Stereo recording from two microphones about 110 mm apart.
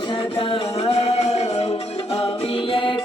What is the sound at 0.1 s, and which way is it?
Music, 50° left (ahead or behind).